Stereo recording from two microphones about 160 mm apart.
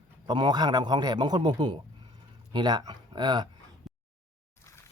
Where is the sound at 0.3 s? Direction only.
25° right (ahead or behind).